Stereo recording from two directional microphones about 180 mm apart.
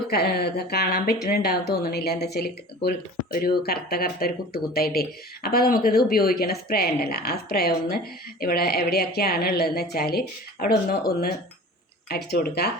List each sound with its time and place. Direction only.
0.1 s a woman's voice: 60° left (ahead or behind)
12.0 s a woman's voice: 60° left (ahead or behind)